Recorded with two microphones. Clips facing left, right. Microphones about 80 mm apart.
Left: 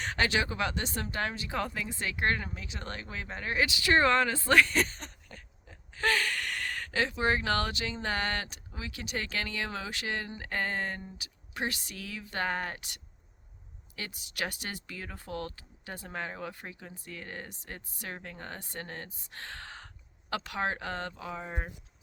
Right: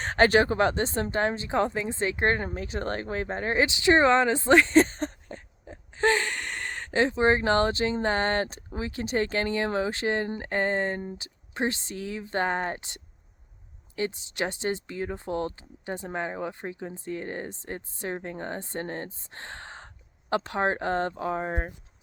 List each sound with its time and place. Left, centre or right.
0.0 s speech: right